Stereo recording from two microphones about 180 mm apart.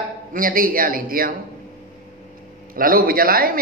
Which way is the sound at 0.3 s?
50° right (ahead or behind).